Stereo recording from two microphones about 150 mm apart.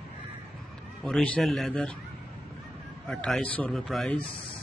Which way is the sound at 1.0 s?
5° left (ahead or behind).